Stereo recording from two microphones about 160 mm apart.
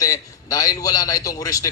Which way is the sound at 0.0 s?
20° left (ahead or behind).